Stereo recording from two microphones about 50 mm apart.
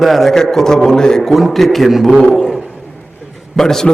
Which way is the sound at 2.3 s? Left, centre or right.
Centre.